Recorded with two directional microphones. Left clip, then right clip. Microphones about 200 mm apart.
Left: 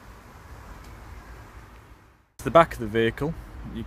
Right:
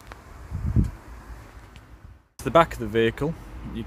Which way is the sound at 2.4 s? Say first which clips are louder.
Left 1 dB; centre (ahead or behind).